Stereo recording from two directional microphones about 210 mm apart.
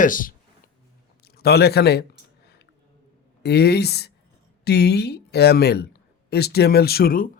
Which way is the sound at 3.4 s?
50° left (ahead or behind).